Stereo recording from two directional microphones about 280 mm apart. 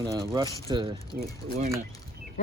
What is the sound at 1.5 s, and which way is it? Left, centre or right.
Speech, right.